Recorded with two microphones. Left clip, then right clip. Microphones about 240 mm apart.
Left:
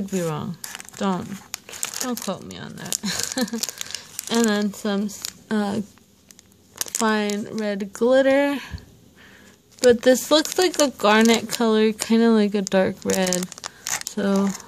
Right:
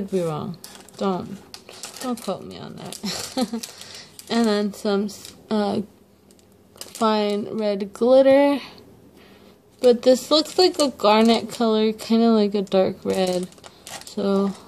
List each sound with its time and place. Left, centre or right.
0.1 s speech: left
9.8 s speech: left